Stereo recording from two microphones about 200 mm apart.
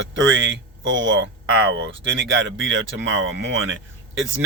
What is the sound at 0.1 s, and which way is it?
Speech, 70° right (ahead or behind).